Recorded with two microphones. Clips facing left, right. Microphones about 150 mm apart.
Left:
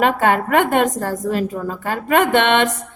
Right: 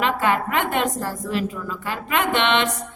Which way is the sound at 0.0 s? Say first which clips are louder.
Left 5 dB; 50° left (ahead or behind).